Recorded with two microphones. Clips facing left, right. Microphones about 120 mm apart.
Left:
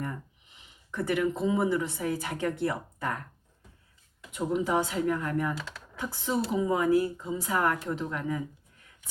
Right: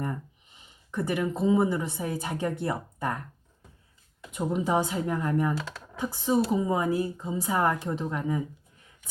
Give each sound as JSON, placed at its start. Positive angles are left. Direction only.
{"t": 0.9, "sound": "speech", "side_deg": -20}
{"t": 4.4, "sound": "speech", "side_deg": -25}